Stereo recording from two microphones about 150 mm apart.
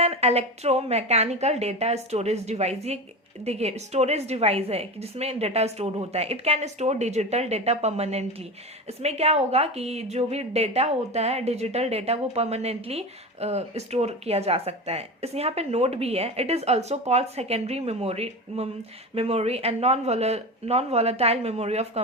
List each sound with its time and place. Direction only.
0.0 s a woman's voice: 45° right (ahead or behind)